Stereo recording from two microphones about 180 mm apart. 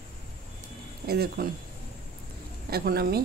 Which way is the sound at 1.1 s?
60° right (ahead or behind).